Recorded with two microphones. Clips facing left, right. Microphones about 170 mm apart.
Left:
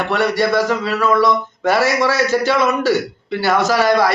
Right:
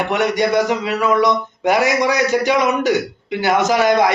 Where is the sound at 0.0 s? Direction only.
15° right (ahead or behind).